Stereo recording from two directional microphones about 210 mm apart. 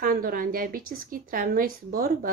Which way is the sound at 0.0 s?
45° right (ahead or behind).